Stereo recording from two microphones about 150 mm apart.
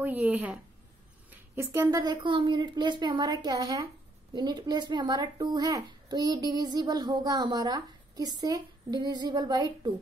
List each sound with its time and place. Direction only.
0.0 s a woman's voice: 10° right (ahead or behind); by 9.9 s 25° right (ahead or behind)